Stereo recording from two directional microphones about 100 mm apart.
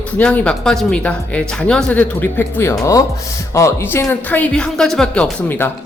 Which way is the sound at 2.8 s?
30° left (ahead or behind).